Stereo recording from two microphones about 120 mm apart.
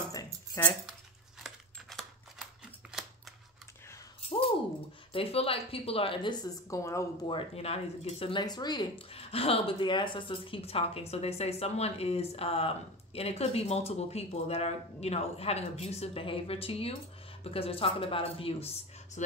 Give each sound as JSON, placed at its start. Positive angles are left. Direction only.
{"t": 0.6, "sound": "speech", "side_deg": 25}
{"t": 1.4, "sound": "a sound", "side_deg": 0}
{"t": 5.1, "sound": "a woman's voice", "side_deg": 50}
{"t": 7.2, "sound": "a woman's voice", "side_deg": 50}
{"t": 8.9, "sound": "a woman's voice", "side_deg": 55}